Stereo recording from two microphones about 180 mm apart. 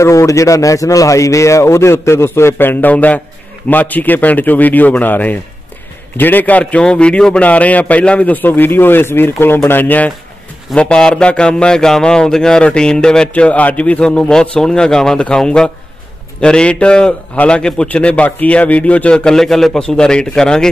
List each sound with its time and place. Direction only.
0.0 s a man's voice: 15° left (ahead or behind)